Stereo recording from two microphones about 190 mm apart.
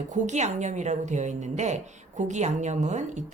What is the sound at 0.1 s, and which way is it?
A woman's voice, 35° right (ahead or behind).